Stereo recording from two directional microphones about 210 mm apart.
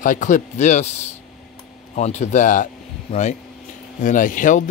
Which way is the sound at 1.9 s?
30° left (ahead or behind).